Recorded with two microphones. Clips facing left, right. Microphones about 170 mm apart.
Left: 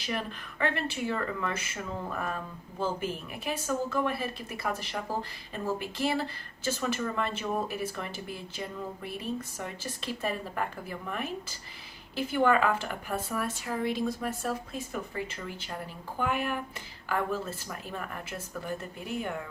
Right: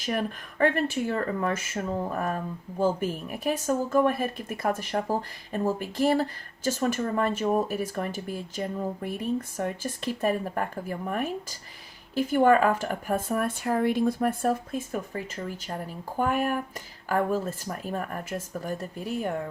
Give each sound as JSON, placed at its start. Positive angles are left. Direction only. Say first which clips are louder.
{"t": 0.0, "sound": "speech", "louder": "right 5 dB", "side_deg": -45}